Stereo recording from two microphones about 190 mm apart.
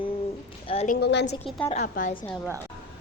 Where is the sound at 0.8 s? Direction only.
60° left (ahead or behind).